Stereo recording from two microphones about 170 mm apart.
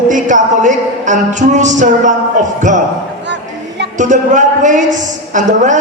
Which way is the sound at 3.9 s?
45° right (ahead or behind).